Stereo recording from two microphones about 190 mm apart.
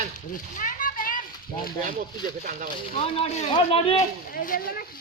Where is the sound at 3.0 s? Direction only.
35° left (ahead or behind).